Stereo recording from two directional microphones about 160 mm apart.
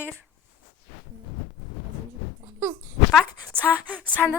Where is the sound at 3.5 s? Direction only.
10° left (ahead or behind).